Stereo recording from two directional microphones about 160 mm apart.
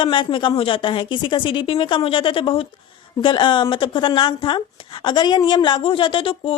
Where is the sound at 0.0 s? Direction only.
30° left (ahead or behind).